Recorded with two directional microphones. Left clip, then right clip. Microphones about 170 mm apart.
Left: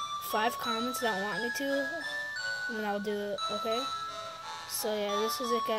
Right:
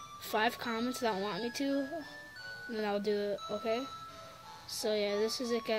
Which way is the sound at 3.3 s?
35° left (ahead or behind).